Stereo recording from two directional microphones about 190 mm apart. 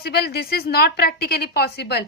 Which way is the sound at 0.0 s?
55° left (ahead or behind).